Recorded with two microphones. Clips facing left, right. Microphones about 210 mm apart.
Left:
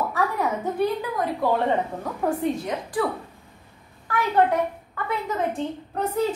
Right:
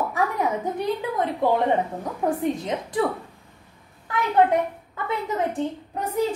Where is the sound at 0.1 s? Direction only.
20° right (ahead or behind).